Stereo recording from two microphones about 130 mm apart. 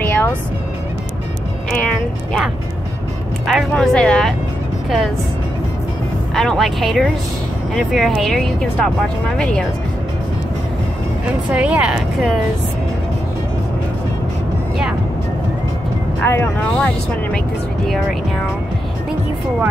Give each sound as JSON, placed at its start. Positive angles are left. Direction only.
{"t": 0.0, "sound": "music", "side_deg": 15}
{"t": 1.7, "sound": "music", "side_deg": 0}
{"t": 3.4, "sound": "speech", "side_deg": 0}
{"t": 6.3, "sound": "speech", "side_deg": 0}
{"t": 11.5, "sound": "speech", "side_deg": -10}
{"t": 16.2, "sound": "speech", "side_deg": 20}